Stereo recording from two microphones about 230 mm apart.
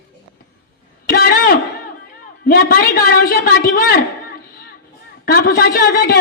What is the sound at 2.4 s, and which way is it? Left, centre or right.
A woman's voice, left.